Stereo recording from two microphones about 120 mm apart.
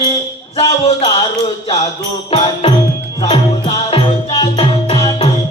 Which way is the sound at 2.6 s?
50° left (ahead or behind).